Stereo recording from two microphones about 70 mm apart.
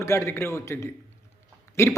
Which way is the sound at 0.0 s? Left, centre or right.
Left.